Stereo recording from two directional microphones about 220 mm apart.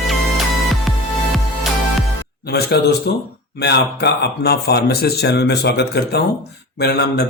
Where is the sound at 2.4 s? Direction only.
45° left (ahead or behind).